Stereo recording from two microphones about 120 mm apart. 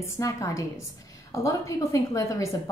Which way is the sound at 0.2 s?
25° left (ahead or behind).